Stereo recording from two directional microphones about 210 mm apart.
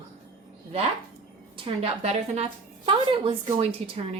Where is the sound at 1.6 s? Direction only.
25° right (ahead or behind).